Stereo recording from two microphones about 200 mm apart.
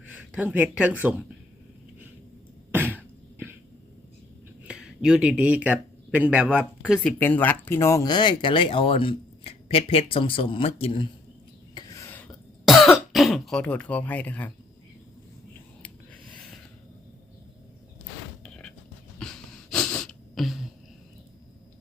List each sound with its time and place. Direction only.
0.0 s speech: 10° right (ahead or behind)
2.7 s throat clearing: 10° right (ahead or behind)
4.6 s speech: 5° right (ahead or behind)
7.2 s speech: 10° left (ahead or behind); by 11.1 s 25° left (ahead or behind)
11.7 s a sound: 15° left (ahead or behind)
12.6 s throat clearing: centre (ahead or behind)
18.4 s music: 5° left (ahead or behind)
19.2 s a sound: 5° left (ahead or behind)